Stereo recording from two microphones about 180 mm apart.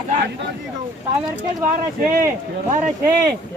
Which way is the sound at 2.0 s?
50° right (ahead or behind).